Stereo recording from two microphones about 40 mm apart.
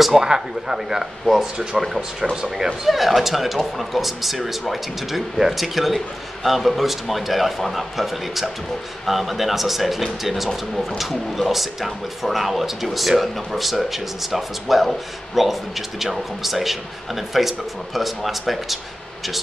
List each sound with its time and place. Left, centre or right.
0.0 s speech: centre
2.9 s speech: centre